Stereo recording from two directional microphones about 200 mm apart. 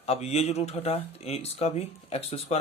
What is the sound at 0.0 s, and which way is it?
Speech, 30° left (ahead or behind).